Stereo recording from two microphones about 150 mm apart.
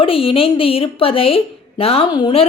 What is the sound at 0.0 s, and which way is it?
A woman's voice, 35° left (ahead or behind).